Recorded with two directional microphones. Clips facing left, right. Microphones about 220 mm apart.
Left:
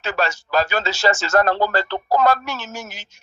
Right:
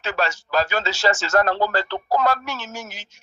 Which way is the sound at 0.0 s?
45° left (ahead or behind).